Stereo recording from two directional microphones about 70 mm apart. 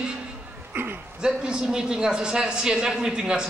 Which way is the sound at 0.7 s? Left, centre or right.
Right.